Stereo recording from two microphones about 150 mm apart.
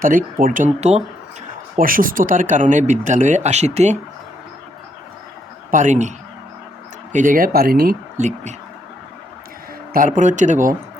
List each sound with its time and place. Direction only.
0.0 s speech: 65° right (ahead or behind); by 1.0 s 45° right (ahead or behind)
1.8 s speech: 70° right (ahead or behind); by 3.9 s 45° right (ahead or behind)
5.7 s a man's voice: 55° right (ahead or behind); by 7.9 s 80° right
8.2 s a man's voice: 50° right (ahead or behind)
9.9 s speech: 60° right (ahead or behind)